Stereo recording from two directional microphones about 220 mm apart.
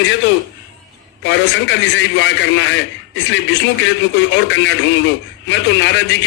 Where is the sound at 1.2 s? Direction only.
55° left (ahead or behind).